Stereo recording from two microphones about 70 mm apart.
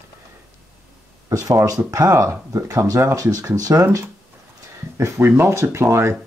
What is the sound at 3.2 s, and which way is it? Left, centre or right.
Speech, right.